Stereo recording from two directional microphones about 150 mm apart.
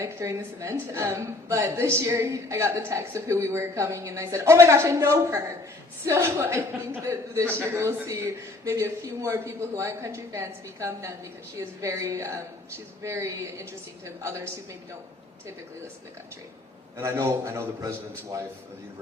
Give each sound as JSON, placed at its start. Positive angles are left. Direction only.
{"t": 0.0, "sound": "a woman's voice", "side_deg": -20}
{"t": 17.0, "sound": "a woman's voice", "side_deg": -20}